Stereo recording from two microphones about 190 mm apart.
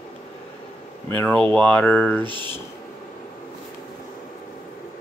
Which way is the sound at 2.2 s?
25° right (ahead or behind).